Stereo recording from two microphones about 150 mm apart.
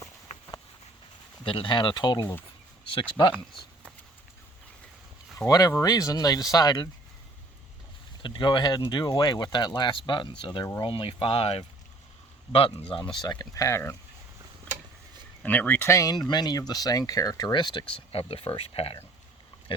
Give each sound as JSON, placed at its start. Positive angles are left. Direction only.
{"t": 1.5, "sound": "speech", "side_deg": 35}
{"t": 3.3, "sound": "a sound", "side_deg": 0}
{"t": 5.5, "sound": "speech", "side_deg": 25}
{"t": 8.2, "sound": "speech", "side_deg": 30}
{"t": 13.1, "sound": "speech", "side_deg": 25}
{"t": 15.4, "sound": "speech", "side_deg": 10}